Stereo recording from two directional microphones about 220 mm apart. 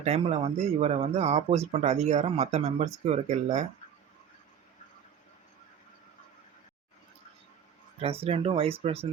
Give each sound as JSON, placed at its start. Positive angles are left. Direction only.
{"t": 0.0, "sound": "speech", "side_deg": -30}
{"t": 8.0, "sound": "speech", "side_deg": -25}